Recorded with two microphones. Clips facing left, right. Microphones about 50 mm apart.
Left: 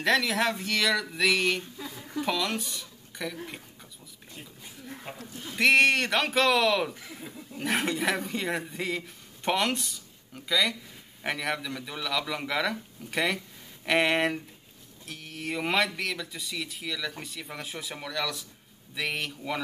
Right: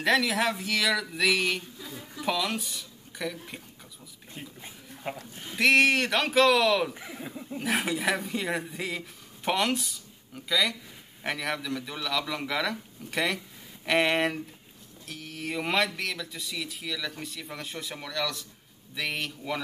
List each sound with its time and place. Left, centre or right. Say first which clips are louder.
0.0 s speech: even; centre
5.1 s speech: right 8 dB; right
5.6 s speech: even; centre
6.9 s a sound: right 3 dB; centre
7.5 s speech: even; centre